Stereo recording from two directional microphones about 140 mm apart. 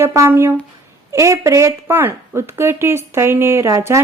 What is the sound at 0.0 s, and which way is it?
Speech, 15° right (ahead or behind).